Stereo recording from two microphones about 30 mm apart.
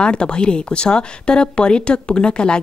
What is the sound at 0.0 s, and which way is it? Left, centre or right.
Speech, left.